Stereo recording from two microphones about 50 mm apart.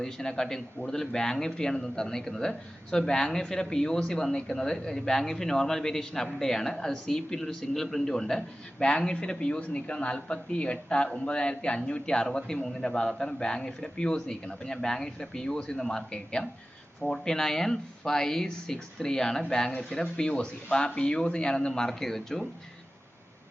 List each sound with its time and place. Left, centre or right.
0.0 s speech: centre